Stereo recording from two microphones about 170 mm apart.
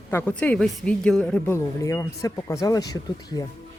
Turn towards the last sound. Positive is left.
turn(degrees=20)  # may be behind; listen again after turning